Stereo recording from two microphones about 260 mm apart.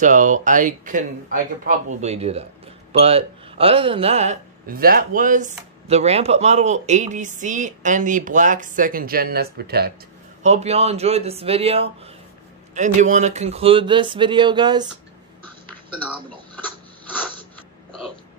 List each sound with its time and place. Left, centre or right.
0.0 s speech: right
10.4 s speech: right